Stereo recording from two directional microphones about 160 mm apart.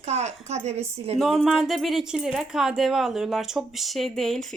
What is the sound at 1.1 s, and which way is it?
Speech, centre (ahead or behind).